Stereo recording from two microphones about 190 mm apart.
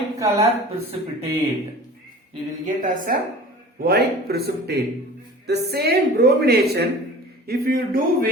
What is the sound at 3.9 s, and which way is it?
A woman's voice, 55° right (ahead or behind).